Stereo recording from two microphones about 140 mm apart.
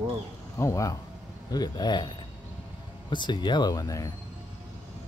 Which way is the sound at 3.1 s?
30° left (ahead or behind).